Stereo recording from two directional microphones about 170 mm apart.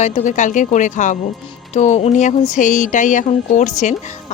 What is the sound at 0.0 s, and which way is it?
A woman's voice, 40° left (ahead or behind).